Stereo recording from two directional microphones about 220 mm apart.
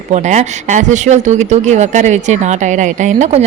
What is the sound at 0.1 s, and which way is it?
Speech, 30° right (ahead or behind).